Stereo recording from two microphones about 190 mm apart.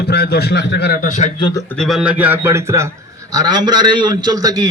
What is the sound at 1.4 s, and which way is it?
Speech, 25° left (ahead or behind).